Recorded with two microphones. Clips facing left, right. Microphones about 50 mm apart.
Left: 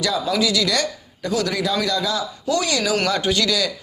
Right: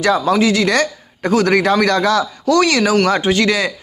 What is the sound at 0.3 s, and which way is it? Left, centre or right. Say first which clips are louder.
A man's voice: right 6 dB; right.